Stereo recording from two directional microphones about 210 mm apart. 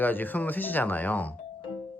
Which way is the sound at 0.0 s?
10° left (ahead or behind).